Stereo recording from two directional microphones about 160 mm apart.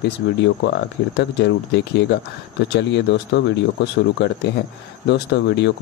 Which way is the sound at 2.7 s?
90° left.